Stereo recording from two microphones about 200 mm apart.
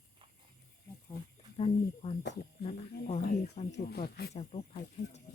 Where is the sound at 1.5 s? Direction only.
30° left (ahead or behind).